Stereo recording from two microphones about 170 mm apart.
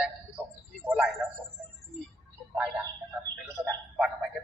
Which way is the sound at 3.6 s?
10° right (ahead or behind).